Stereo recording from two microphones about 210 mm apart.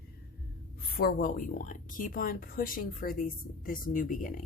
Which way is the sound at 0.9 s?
40° left (ahead or behind).